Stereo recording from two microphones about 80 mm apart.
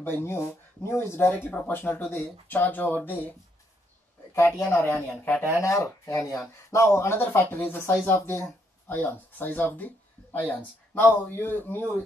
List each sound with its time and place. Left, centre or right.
0.0 s speech: left
4.4 s speech: left